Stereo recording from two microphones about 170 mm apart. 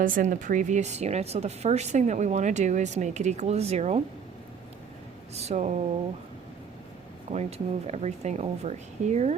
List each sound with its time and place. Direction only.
0.0 s speech: 50° right (ahead or behind)
5.3 s speech: 40° right (ahead or behind)
7.3 s speech: 40° right (ahead or behind)